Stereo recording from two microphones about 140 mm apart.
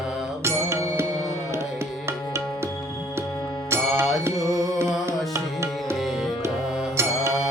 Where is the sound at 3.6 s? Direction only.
20° right (ahead or behind).